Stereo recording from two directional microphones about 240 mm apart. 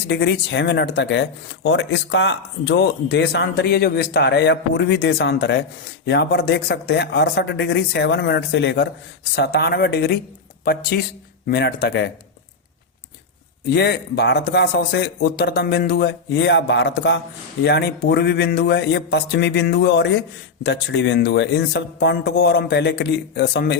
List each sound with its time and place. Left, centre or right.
0.1 s speech: left
13.7 s speech: left